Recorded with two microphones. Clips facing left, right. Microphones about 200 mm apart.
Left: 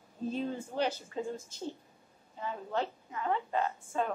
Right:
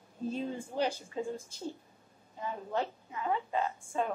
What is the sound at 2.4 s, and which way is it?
A woman's voice, 10° right (ahead or behind).